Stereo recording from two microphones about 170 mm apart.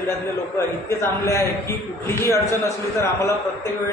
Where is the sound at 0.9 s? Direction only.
15° left (ahead or behind).